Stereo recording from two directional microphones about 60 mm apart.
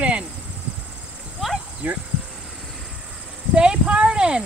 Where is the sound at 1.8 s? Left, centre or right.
Right.